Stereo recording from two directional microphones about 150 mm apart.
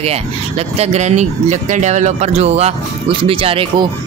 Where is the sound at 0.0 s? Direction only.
45° right (ahead or behind).